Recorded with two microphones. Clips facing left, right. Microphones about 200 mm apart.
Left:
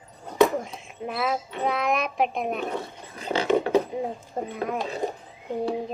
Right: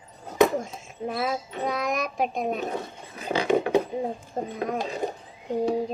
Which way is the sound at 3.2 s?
10° right (ahead or behind).